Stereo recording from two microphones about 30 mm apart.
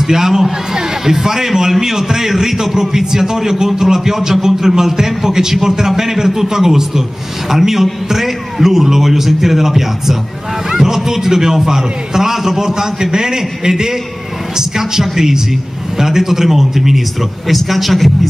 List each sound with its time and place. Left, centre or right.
0.0 s a man's voice: centre